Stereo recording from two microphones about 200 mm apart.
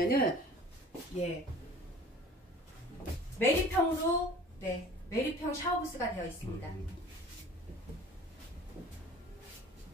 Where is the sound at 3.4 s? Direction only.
10° left (ahead or behind).